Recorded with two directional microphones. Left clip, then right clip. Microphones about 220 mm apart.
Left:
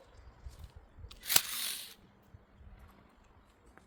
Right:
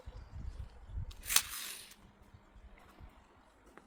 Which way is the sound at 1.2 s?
35° left (ahead or behind).